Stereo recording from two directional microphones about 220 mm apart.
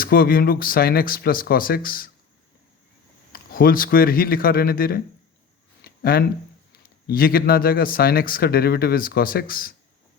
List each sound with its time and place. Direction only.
0.0 s speech: 40° left (ahead or behind)
3.3 s speech: 40° left (ahead or behind)
5.8 s a sound: 45° left (ahead or behind)
7.1 s speech: 40° left (ahead or behind)